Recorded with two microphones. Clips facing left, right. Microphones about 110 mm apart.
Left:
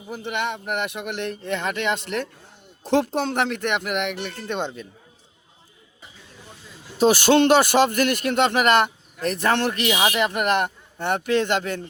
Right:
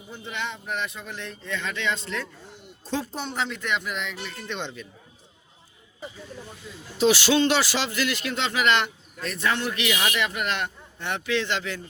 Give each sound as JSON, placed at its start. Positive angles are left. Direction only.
{"t": 0.1, "sound": "speech", "side_deg": 65}
{"t": 2.8, "sound": "speech", "side_deg": 80}
{"t": 4.4, "sound": "speech", "side_deg": 45}
{"t": 7.0, "sound": "speech", "side_deg": 50}